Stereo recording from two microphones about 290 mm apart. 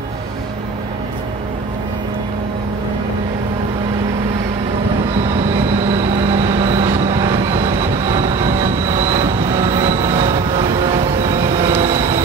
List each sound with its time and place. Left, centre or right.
5.5 s vehicle: centre